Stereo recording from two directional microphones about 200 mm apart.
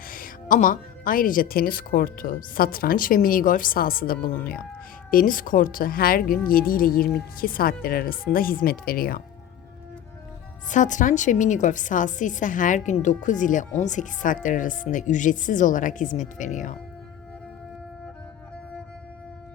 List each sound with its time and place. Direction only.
0.0 s a woman's voice: 45° left (ahead or behind)
10.7 s a woman's voice: 40° left (ahead or behind)